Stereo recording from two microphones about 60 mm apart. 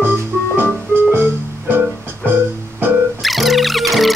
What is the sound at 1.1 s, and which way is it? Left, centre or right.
Keyboard, right.